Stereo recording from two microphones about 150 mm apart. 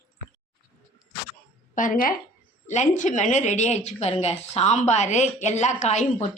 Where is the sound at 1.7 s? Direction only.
65° left (ahead or behind).